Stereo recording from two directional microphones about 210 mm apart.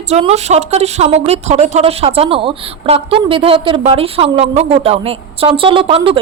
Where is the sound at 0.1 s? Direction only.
30° right (ahead or behind).